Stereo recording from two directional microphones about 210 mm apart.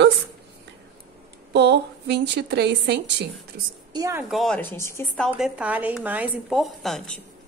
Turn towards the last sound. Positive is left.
turn(degrees=0)  # may be behind; listen again after turning